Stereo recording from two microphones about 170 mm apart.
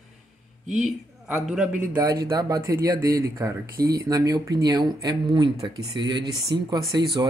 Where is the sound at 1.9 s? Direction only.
20° right (ahead or behind).